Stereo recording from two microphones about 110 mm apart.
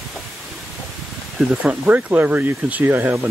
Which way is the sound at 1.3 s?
5° right (ahead or behind).